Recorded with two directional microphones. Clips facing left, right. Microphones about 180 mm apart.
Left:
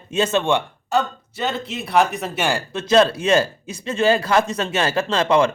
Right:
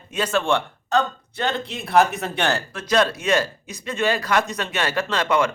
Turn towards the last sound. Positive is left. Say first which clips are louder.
# left 4 dB
turn(degrees=30)  # may be behind; listen again after turning